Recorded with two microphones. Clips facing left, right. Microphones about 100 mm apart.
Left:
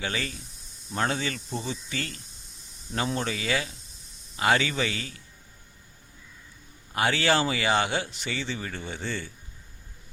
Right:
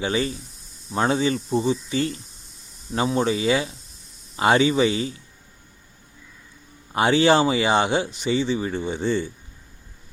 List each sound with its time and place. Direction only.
0.0 s speech: 25° right (ahead or behind)
1.5 s speech: 35° right (ahead or behind)
1.9 s speech: 25° right (ahead or behind)
6.9 s speech: 20° right (ahead or behind)